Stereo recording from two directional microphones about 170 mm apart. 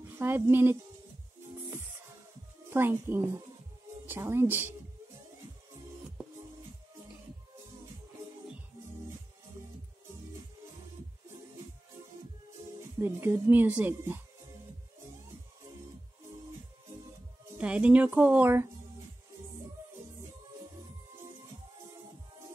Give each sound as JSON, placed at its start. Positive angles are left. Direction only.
{"t": 0.0, "sound": "speech", "side_deg": -15}
{"t": 2.7, "sound": "a woman's voice", "side_deg": -15}
{"t": 13.0, "sound": "a woman's voice", "side_deg": -15}
{"t": 17.6, "sound": "a woman's voice", "side_deg": -5}